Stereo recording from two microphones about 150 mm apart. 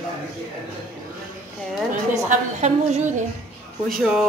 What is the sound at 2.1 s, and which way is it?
A woman's voice, 55° right (ahead or behind).